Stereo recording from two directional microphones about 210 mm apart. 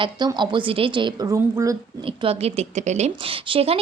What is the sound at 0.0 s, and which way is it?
A woman's voice, 20° right (ahead or behind).